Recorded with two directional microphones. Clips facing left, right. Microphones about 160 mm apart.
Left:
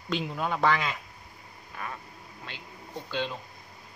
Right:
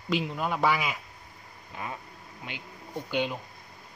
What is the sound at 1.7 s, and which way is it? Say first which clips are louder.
Vehicle: right 1 dB; 20° right (ahead or behind).